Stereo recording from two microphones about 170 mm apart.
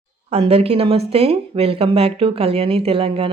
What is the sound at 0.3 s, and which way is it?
Speech, 35° right (ahead or behind).